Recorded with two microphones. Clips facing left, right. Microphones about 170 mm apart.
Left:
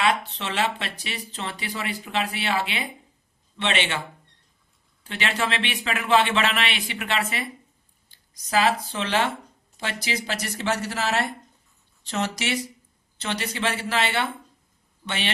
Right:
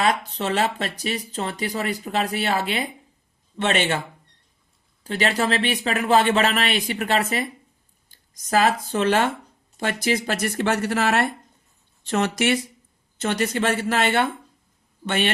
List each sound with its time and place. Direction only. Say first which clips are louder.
0.0 s speech: right 2 dB; 40° right (ahead or behind)
5.0 s speech: right 5 dB; 40° right (ahead or behind)